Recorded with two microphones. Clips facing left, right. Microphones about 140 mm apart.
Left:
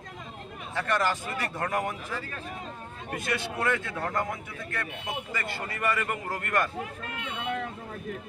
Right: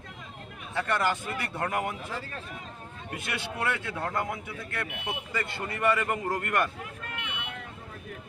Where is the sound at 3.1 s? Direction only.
15° right (ahead or behind).